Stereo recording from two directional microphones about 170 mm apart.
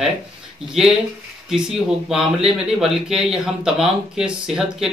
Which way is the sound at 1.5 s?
5° right (ahead or behind).